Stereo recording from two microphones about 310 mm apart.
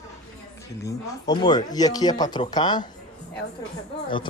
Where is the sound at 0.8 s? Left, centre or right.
Centre.